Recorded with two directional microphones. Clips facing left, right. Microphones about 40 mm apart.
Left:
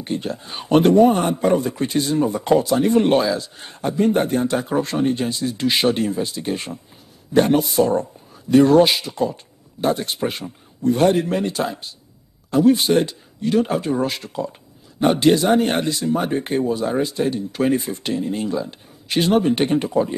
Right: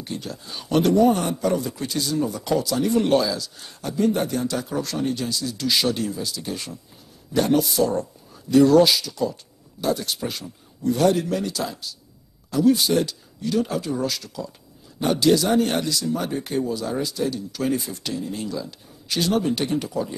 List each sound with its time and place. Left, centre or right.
0.0 s speech: left